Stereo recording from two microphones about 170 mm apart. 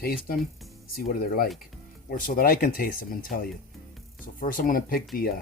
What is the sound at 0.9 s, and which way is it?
Speech, 60° left (ahead or behind).